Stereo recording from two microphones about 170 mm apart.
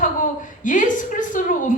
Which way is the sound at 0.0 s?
50° left (ahead or behind).